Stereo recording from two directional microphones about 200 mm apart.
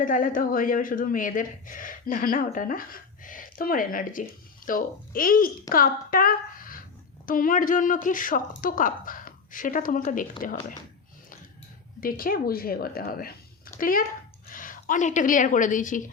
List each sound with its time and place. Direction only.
0.0 s a woman's voice: 40° left (ahead or behind)
11.9 s a woman's voice: 45° left (ahead or behind)